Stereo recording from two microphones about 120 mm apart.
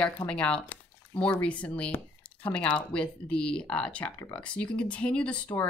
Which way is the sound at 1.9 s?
45° left (ahead or behind).